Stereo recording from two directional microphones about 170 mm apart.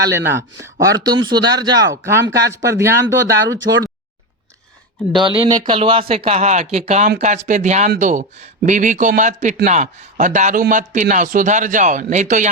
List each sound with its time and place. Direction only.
0.1 s speech: 15° right (ahead or behind)
5.1 s a man's voice: 30° right (ahead or behind); by 12.5 s 45° right (ahead or behind)